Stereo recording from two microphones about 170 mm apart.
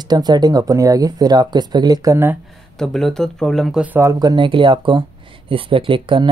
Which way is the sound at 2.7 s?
Centre (ahead or behind).